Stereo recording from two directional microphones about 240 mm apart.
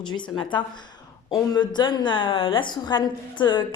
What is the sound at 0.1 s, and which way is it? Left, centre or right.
A woman's voice, centre.